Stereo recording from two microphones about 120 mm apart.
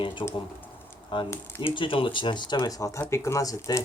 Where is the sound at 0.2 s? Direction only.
40° left (ahead or behind).